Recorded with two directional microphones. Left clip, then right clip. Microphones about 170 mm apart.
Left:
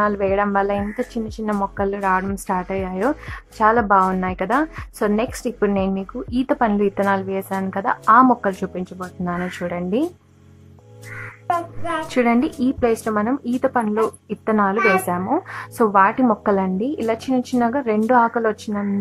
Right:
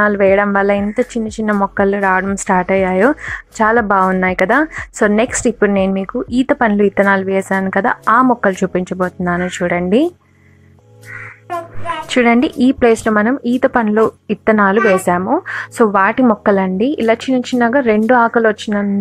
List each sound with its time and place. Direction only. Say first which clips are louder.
0.0 s a woman's voice: right 7 dB; 25° right (ahead or behind)
12.1 s a woman's voice: right 7 dB; 25° right (ahead or behind)